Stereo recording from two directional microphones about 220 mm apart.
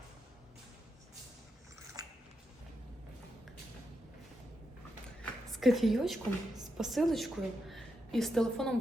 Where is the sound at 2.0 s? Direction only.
15° right (ahead or behind).